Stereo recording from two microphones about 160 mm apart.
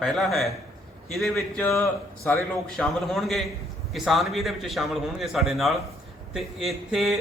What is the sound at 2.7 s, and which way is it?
A man's voice, centre (ahead or behind).